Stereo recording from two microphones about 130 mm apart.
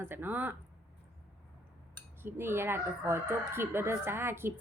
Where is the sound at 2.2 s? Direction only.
15° right (ahead or behind).